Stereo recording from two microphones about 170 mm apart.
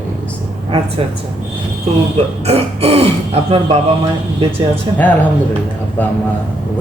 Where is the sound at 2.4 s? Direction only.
35° right (ahead or behind).